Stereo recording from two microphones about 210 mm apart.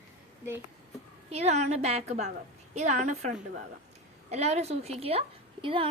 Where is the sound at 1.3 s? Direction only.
30° right (ahead or behind).